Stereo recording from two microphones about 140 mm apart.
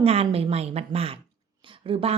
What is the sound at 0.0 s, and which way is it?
A woman's voice, 45° right (ahead or behind).